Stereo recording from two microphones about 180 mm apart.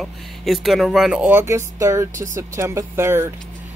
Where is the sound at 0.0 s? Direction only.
Centre (ahead or behind).